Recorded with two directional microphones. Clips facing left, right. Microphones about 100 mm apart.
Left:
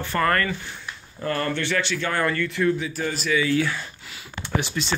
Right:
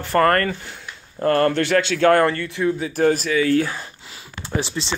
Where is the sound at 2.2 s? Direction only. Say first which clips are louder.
Right 2 dB; 25° right (ahead or behind).